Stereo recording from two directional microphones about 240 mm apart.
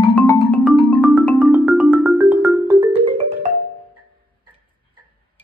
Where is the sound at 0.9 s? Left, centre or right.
Centre.